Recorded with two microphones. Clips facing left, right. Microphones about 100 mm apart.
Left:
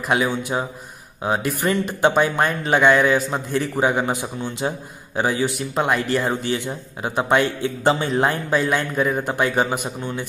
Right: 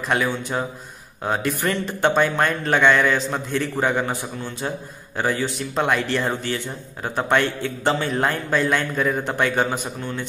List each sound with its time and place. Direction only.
0.1 s a man's voice: 10° left (ahead or behind)
6.4 s a man's voice: 15° left (ahead or behind)